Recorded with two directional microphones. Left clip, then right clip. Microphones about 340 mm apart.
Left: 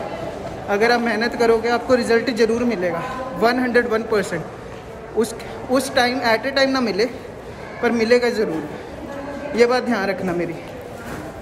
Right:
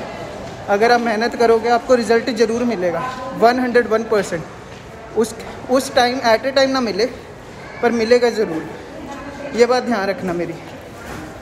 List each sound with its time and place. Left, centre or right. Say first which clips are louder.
0.7 s a man's voice: right 3 dB; centre
9.6 s a man's voice: right 2 dB; centre